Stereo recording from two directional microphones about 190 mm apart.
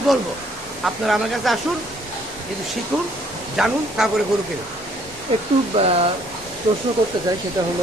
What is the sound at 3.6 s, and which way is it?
Speech, centre (ahead or behind).